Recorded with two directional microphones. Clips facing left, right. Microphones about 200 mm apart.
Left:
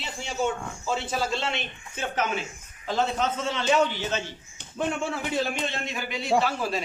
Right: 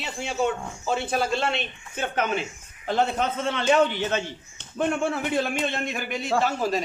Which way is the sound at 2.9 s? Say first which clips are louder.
Right 2 dB; 55° right (ahead or behind).